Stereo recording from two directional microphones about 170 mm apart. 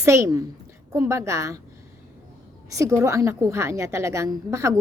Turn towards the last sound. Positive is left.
turn(degrees=-15)  # may be behind; listen again after turning